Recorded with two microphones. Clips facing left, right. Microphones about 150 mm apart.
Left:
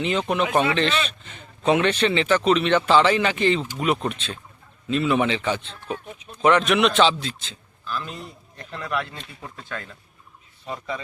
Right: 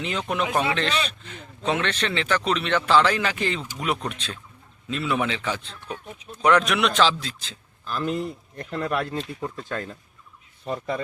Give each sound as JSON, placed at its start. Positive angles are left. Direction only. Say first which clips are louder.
{"t": 0.0, "sound": "a man's voice", "louder": "left 4 dB", "side_deg": 0}
{"t": 7.9, "sound": "speech", "louder": "right 6 dB", "side_deg": -50}
{"t": 10.7, "sound": "speech", "louder": "right 3 dB", "side_deg": -50}